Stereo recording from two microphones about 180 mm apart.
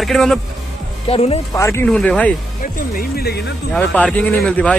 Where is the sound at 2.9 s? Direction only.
60° left (ahead or behind).